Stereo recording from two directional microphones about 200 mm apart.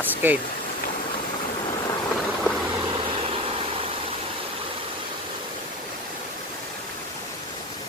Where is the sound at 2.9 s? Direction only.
30° right (ahead or behind).